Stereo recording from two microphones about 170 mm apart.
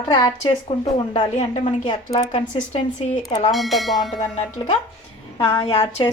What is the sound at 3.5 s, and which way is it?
Speech, centre (ahead or behind).